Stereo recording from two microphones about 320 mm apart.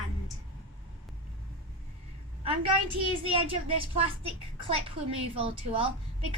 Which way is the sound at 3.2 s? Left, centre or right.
Centre.